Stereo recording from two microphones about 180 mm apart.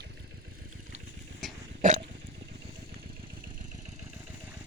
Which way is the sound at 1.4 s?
Centre (ahead or behind).